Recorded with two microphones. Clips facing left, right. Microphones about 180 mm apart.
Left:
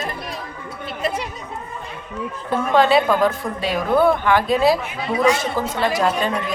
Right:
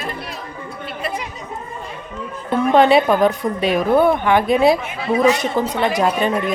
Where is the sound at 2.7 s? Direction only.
20° right (ahead or behind).